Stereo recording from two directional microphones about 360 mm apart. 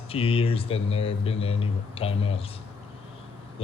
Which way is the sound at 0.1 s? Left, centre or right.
Centre.